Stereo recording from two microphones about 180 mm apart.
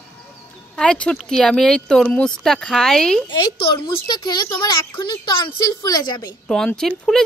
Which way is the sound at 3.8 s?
55° left (ahead or behind).